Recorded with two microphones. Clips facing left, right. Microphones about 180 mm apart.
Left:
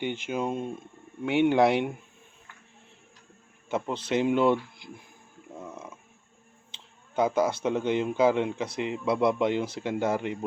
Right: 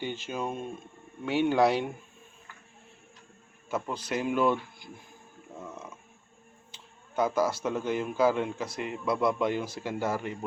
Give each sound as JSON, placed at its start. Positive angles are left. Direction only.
{"t": 0.0, "sound": "speech", "side_deg": 20}
{"t": 3.7, "sound": "speech", "side_deg": 25}
{"t": 6.7, "sound": "speech", "side_deg": 20}